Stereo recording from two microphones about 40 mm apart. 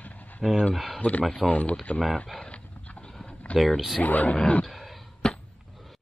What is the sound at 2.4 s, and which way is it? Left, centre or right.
Dog, left.